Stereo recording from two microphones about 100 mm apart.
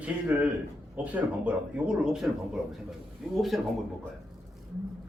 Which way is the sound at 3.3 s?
Centre (ahead or behind).